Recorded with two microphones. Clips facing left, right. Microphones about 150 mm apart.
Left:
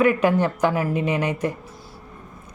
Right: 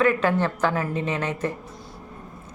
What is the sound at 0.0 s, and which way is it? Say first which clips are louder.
A woman's voice: left 3 dB; 15° left (ahead or behind).